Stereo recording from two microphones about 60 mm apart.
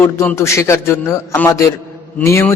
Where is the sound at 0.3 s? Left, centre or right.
Left.